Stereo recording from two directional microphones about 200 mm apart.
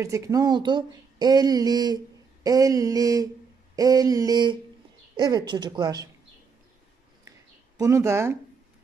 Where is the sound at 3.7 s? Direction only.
20° right (ahead or behind).